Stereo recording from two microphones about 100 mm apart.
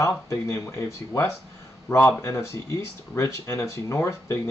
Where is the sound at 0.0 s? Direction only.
30° left (ahead or behind).